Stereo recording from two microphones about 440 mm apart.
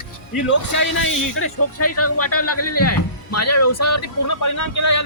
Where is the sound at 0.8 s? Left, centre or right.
Left.